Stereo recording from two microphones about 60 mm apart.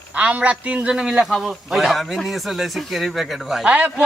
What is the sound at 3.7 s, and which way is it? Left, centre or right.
Speech, right.